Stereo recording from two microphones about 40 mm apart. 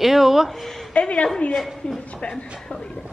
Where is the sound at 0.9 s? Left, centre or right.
Left.